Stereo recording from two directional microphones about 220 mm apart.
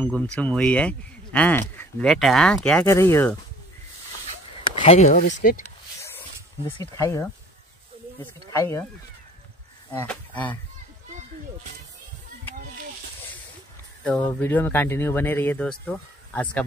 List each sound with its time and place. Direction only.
0.0 s speech: 5° left (ahead or behind)
4.7 s speech: 30° left (ahead or behind)
7.0 s speech: 15° left (ahead or behind)
8.5 s speech: 10° left (ahead or behind)
9.8 s speech: 5° left (ahead or behind)
14.4 s speech: 10° left (ahead or behind)